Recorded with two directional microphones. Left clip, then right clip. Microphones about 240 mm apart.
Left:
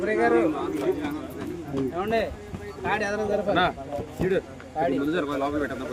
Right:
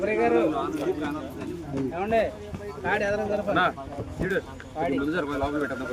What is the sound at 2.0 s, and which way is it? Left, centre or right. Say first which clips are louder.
Speech: right 3 dB; left.